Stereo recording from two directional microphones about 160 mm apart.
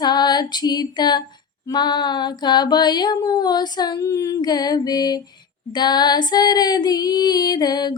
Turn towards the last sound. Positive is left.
turn(degrees=25)  # may be behind; listen again after turning